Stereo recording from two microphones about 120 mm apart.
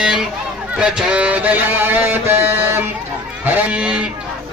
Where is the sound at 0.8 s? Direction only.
10° right (ahead or behind).